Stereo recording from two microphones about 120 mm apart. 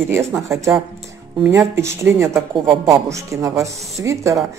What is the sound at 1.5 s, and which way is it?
Speech, 25° right (ahead or behind).